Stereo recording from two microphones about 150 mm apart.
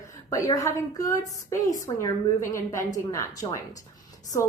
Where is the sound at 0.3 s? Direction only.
20° left (ahead or behind).